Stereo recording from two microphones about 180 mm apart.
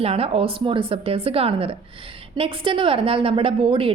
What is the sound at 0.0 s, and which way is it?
A woman's voice, 35° right (ahead or behind).